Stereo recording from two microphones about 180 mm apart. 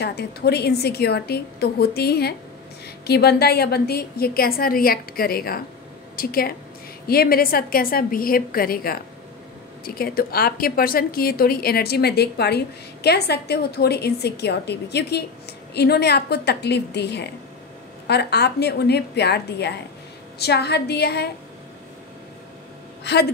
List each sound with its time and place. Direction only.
0.0 s a woman's voice: 65° left (ahead or behind)
23.0 s a woman's voice: 65° left (ahead or behind)